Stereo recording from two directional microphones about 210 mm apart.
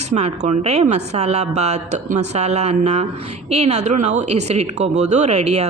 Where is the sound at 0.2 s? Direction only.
30° right (ahead or behind).